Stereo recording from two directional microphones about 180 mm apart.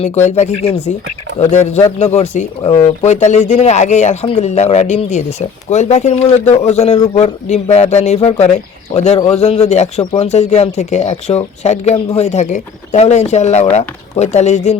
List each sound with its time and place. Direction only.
0.3 s speech: 40° left (ahead or behind)